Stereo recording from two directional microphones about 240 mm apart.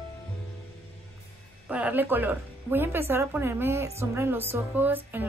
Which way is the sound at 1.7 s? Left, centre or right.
Centre.